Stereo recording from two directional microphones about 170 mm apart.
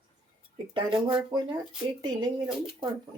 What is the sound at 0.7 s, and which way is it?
Speech, 30° right (ahead or behind).